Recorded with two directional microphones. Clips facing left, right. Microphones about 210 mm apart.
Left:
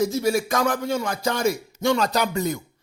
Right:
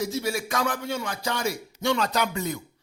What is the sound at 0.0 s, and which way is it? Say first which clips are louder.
Speech: left 6 dB; 45° left (ahead or behind).